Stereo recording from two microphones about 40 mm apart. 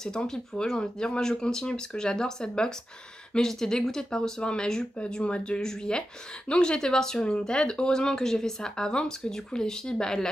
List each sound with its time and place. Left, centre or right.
0.3 s speech: centre
3.3 s speech: centre
4.4 s speech: left